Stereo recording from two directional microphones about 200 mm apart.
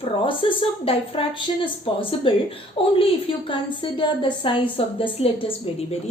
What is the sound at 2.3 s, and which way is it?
A woman's voice, 25° left (ahead or behind).